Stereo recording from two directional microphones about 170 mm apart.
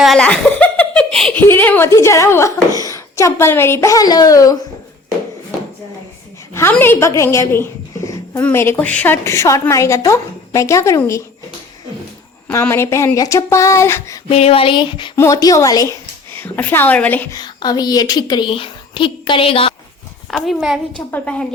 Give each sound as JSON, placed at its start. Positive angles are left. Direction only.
{"t": 0.0, "sound": "a sound", "side_deg": 5}
{"t": 1.5, "sound": "a woman's voice", "side_deg": 10}
{"t": 6.5, "sound": "a woman's voice", "side_deg": 15}
{"t": 12.5, "sound": "a woman's voice", "side_deg": 15}
{"t": 14.3, "sound": "a woman's voice", "side_deg": 35}
{"t": 17.3, "sound": "a woman's voice", "side_deg": 25}
{"t": 20.3, "sound": "a woman's voice", "side_deg": 0}